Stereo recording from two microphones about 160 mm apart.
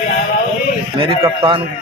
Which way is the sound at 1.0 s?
35° right (ahead or behind).